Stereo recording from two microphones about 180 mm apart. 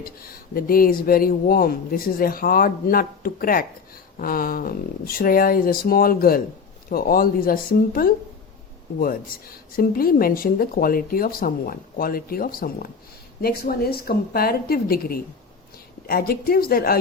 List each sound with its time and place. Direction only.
0.5 s a woman's voice: 55° left (ahead or behind)
9.7 s a woman's voice: 55° left (ahead or behind)